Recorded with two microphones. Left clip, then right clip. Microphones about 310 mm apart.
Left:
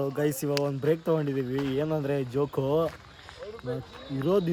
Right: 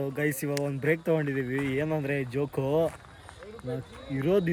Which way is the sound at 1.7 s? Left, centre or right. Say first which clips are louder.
Left 2 dB; centre.